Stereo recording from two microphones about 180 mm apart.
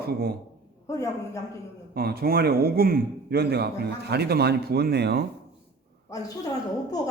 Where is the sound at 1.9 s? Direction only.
60° right (ahead or behind).